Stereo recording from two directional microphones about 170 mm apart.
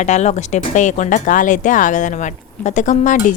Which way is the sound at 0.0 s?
45° left (ahead or behind).